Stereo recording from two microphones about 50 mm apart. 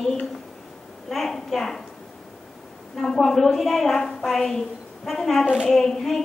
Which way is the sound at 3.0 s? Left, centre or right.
Centre.